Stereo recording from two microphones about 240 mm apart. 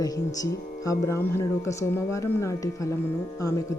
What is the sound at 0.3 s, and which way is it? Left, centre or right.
Speech, centre.